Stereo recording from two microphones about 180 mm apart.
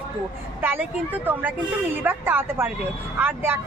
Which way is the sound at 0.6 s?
10° right (ahead or behind).